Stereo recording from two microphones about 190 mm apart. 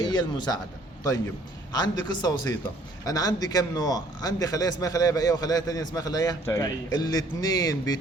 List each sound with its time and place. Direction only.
0.0 s speech: 20° left (ahead or behind)
1.7 s a man's voice: 20° left (ahead or behind)